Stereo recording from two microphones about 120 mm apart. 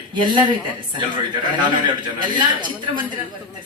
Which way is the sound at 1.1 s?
40° right (ahead or behind).